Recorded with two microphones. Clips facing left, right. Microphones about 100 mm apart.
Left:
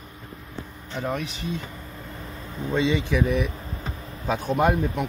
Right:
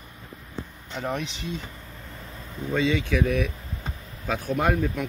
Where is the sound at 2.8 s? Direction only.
20° left (ahead or behind).